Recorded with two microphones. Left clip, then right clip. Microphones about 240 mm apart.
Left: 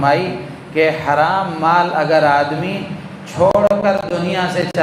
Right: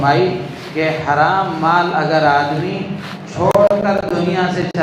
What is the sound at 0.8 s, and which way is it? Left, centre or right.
A man's voice, left.